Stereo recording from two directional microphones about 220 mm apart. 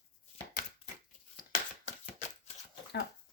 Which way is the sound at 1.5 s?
35° left (ahead or behind).